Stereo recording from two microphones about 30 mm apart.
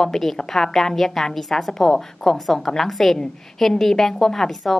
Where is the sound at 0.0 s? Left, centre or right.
Centre.